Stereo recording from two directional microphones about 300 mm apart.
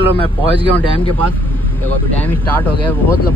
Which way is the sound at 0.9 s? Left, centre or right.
Centre.